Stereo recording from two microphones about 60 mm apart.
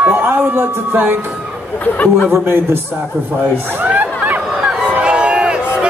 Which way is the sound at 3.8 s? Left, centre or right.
Right.